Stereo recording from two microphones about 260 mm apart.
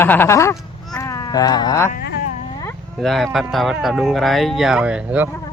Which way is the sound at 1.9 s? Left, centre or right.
Left.